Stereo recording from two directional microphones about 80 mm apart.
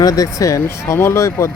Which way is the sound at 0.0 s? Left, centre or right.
Left.